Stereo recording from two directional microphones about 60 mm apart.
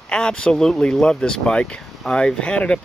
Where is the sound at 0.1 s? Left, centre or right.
Centre.